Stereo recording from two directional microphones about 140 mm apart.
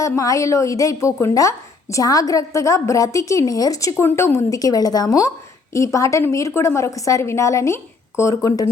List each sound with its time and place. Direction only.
0.0 s speech: 25° left (ahead or behind)